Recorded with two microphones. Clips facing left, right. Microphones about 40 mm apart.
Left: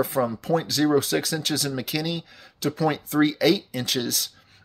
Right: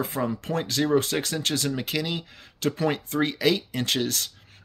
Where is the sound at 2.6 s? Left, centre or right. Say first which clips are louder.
Left 1 dB; right.